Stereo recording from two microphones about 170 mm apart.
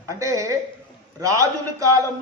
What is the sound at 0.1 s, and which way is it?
A man's voice, 20° right (ahead or behind).